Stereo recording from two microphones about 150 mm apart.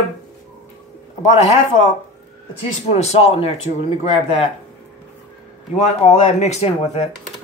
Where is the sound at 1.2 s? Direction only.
45° left (ahead or behind).